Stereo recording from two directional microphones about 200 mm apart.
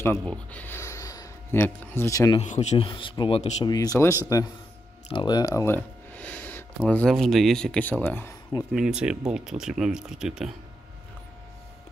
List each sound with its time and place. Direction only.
0.0 s speech: 10° left (ahead or behind)
2.4 s speech: 35° left (ahead or behind)
2.8 s speech: 25° left (ahead or behind)
3.6 s speech: 20° left (ahead or behind)
8.7 s speech: 5° right (ahead or behind)